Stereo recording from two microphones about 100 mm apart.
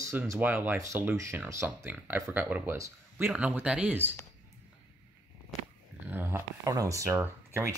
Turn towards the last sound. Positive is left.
turn(degrees=-25)  # may be behind; listen again after turning